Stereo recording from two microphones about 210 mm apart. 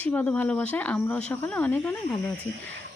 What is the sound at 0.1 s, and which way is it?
Speech, 5° left (ahead or behind).